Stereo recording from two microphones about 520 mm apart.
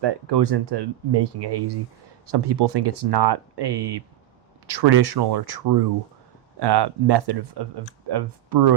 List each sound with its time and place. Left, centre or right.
0.0 s speech: right